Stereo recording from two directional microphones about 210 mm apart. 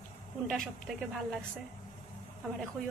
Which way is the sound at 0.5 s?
Centre (ahead or behind).